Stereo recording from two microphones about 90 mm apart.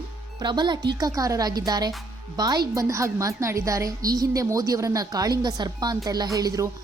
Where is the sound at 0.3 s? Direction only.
55° right (ahead or behind).